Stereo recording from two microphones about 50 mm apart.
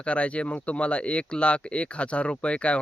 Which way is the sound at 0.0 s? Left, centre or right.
Left.